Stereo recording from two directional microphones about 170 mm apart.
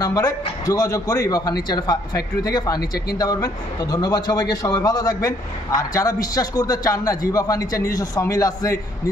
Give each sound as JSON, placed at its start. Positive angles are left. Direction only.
{"t": 0.0, "sound": "a man's voice", "side_deg": 20}